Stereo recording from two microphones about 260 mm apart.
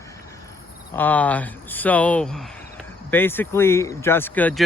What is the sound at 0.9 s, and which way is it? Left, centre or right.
Speech, centre.